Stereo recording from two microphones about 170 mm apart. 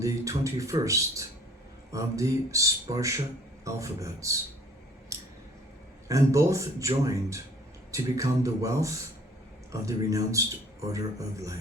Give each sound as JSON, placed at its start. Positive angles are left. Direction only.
{"t": 0.0, "sound": "a man's voice", "side_deg": -20}
{"t": 5.1, "sound": "scissors", "side_deg": -20}
{"t": 6.1, "sound": "a man's voice", "side_deg": -20}